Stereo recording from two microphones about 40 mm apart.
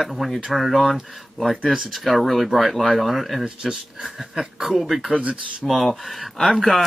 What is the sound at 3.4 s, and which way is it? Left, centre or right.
Speech, centre.